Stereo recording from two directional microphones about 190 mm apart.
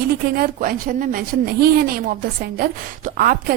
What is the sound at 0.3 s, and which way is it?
A woman's voice, 45° right (ahead or behind).